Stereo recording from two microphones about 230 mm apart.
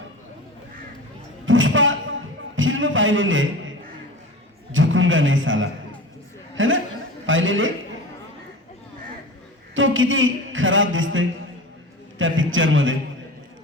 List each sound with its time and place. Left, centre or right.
1.5 s a sound: right
4.7 s a man's voice: right
9.7 s a man's voice: right